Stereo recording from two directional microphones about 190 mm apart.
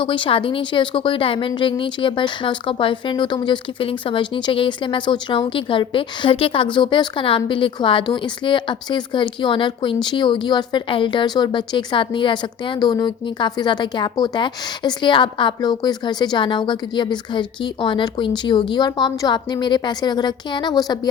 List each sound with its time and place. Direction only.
0.0 s a woman's voice: 25° left (ahead or behind)